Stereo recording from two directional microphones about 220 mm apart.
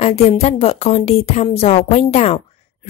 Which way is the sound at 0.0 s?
30° left (ahead or behind).